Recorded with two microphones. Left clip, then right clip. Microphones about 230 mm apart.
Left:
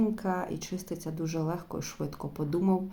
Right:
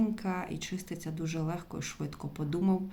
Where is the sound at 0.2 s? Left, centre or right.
Centre.